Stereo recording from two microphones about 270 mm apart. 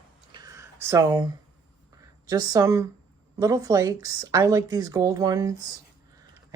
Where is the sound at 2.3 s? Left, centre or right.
Centre.